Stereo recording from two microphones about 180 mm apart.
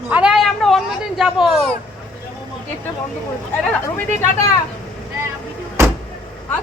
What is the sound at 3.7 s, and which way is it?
Speech, 10° left (ahead or behind).